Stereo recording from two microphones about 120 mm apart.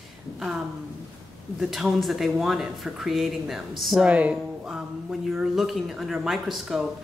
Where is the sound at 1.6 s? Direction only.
Centre (ahead or behind).